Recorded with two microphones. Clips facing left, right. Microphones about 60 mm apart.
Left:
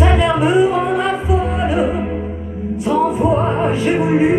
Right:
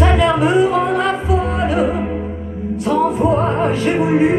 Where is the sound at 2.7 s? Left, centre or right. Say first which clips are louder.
Even; right.